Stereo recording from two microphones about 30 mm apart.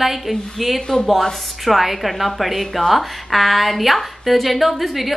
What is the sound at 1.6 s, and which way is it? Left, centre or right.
A woman's voice, centre.